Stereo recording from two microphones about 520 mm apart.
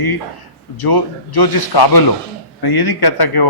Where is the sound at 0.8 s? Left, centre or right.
Left.